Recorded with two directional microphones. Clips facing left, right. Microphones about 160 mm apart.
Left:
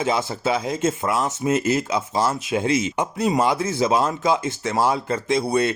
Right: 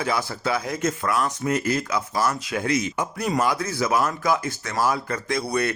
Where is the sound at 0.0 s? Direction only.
20° left (ahead or behind).